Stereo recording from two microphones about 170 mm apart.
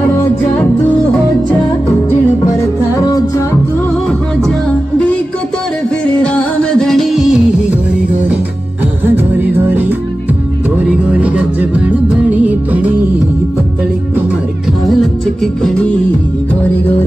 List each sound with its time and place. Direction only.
2.0 s music: 15° left (ahead or behind)
4.5 s music: 5° left (ahead or behind)
6.2 s music: 5° left (ahead or behind); by 12.9 s 10° right (ahead or behind)
15.4 s music: centre (ahead or behind)